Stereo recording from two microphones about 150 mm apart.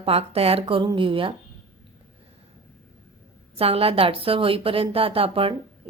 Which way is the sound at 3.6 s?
40° right (ahead or behind).